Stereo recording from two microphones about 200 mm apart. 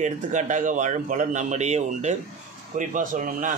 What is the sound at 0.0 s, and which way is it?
Speech, 35° right (ahead or behind).